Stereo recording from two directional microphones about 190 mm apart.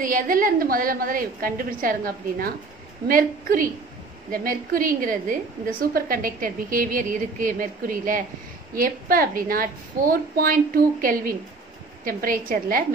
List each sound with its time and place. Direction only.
0.0 s a woman's voice: 45° right (ahead or behind)